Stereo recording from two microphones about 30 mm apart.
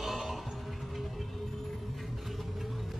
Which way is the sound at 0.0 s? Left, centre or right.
Centre.